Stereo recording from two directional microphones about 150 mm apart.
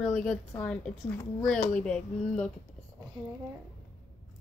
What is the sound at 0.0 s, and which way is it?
Speech, 5° left (ahead or behind).